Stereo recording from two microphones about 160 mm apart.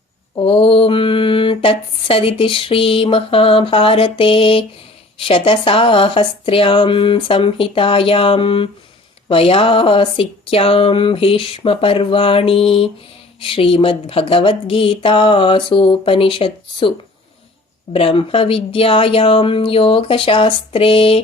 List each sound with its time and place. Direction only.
0.3 s mantra: 35° left (ahead or behind)
17.9 s mantra: 35° left (ahead or behind)